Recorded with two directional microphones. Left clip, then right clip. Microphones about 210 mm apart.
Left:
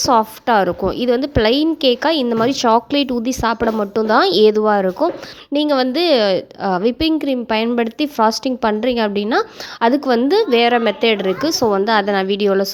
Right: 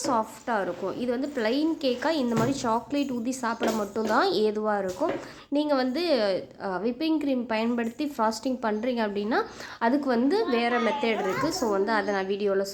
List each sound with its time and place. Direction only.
0.0 s a woman's voice: 40° left (ahead or behind)